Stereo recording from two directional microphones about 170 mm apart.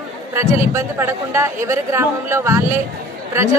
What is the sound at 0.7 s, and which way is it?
A woman's voice, 15° right (ahead or behind).